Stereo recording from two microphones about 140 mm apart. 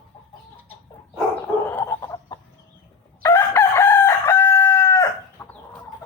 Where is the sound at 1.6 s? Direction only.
15° left (ahead or behind).